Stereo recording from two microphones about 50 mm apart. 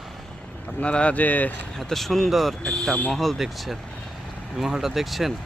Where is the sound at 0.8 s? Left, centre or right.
Left.